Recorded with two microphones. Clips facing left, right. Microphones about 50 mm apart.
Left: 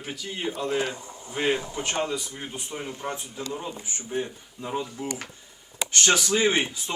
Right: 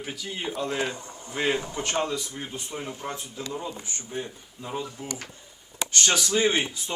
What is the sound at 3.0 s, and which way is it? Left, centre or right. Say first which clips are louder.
Speech: left 2 dB; centre.